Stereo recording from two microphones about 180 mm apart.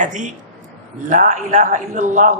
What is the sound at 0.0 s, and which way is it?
A man's voice, 45° right (ahead or behind).